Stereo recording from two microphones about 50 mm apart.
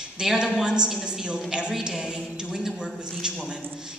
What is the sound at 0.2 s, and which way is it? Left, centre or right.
A man's voice, centre.